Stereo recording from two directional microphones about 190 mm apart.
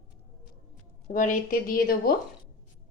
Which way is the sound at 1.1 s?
45° left (ahead or behind).